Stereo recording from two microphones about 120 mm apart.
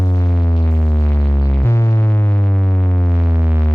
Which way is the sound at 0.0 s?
25° left (ahead or behind).